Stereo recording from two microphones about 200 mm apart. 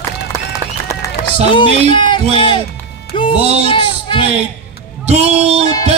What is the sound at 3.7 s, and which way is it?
Speech, 25° left (ahead or behind).